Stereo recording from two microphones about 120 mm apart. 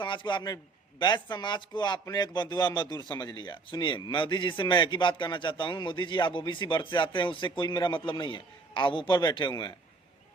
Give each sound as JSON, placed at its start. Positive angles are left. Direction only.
{"t": 0.0, "sound": "a man's voice", "side_deg": 40}